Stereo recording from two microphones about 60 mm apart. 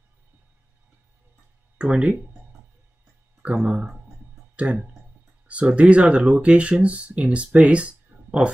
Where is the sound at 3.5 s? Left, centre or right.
Centre.